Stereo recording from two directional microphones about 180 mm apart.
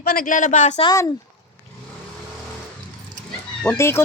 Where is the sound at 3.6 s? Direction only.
10° left (ahead or behind).